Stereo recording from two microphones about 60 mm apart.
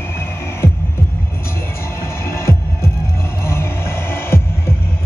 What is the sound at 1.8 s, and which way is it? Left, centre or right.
Music, left.